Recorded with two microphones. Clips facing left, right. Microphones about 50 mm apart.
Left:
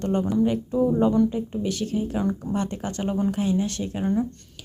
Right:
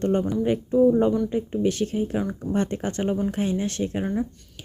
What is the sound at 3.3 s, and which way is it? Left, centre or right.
Speech, right.